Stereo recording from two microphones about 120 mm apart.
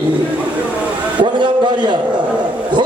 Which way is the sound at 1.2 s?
40° right (ahead or behind).